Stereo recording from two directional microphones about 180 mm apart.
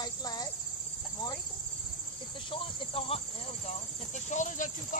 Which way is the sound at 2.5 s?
30° left (ahead or behind).